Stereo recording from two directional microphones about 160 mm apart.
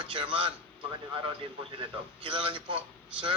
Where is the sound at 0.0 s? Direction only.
30° right (ahead or behind).